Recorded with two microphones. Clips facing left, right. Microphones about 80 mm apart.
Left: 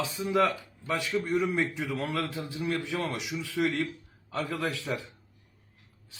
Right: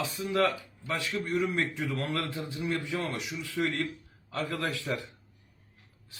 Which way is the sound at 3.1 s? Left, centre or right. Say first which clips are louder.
Left 2 dB; centre.